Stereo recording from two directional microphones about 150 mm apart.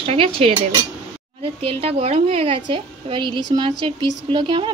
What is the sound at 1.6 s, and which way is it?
A woman's voice, 40° right (ahead or behind).